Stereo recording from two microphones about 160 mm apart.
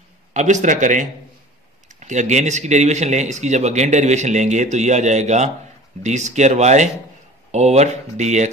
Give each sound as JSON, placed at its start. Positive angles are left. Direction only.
{"t": 0.3, "sound": "speech", "side_deg": -50}